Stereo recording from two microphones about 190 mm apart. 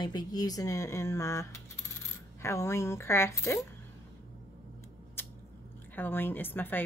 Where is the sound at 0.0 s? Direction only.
20° left (ahead or behind).